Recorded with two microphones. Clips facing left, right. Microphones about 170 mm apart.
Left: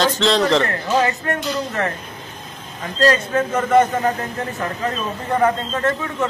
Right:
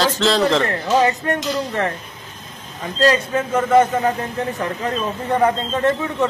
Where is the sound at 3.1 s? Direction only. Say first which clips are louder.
Even; 10° right (ahead or behind).